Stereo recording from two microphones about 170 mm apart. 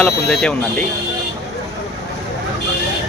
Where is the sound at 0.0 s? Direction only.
5° left (ahead or behind).